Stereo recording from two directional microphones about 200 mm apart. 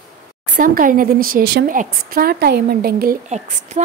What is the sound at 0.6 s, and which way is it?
A woman's voice, 45° right (ahead or behind).